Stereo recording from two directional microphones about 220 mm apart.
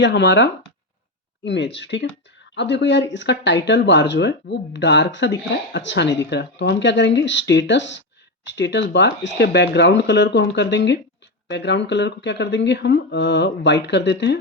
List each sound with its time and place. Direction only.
0.0 s speech: 50° left (ahead or behind)